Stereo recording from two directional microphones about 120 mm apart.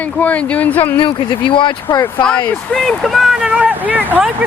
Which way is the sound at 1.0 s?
45° left (ahead or behind).